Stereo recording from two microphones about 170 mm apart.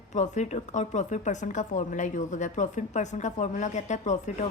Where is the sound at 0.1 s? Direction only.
45° left (ahead or behind).